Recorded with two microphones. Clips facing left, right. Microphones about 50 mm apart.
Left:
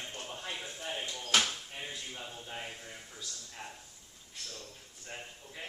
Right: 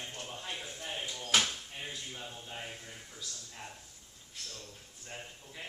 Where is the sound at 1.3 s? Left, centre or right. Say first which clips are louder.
Even; centre.